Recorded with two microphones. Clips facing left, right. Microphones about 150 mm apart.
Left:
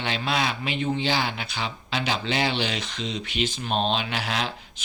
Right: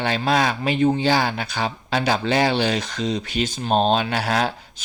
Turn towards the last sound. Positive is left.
turn(degrees=-40)  # may be behind; listen again after turning